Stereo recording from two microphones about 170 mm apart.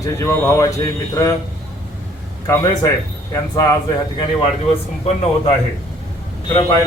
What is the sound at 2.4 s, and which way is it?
Speech, 20° left (ahead or behind).